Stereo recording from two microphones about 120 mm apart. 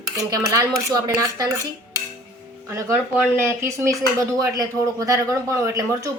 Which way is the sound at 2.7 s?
20° right (ahead or behind).